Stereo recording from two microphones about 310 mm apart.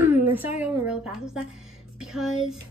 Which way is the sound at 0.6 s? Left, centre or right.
Centre.